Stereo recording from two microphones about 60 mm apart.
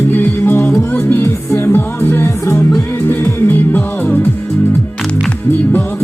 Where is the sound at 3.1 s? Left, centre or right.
Left.